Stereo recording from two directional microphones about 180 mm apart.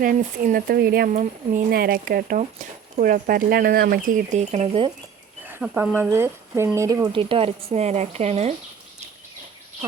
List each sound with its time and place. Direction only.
0.0 s speech: 50° right (ahead or behind)
1.1 s speech: 45° right (ahead or behind)
5.5 s speech: 10° right (ahead or behind); by 8.5 s 35° right (ahead or behind)